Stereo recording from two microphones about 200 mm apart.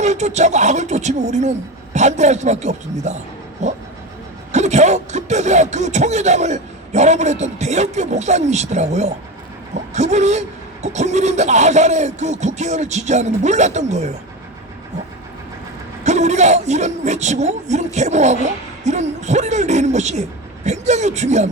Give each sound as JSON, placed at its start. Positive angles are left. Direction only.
{"t": 0.0, "sound": "speech", "side_deg": -35}
{"t": 4.5, "sound": "speech", "side_deg": -35}
{"t": 16.0, "sound": "speech", "side_deg": -35}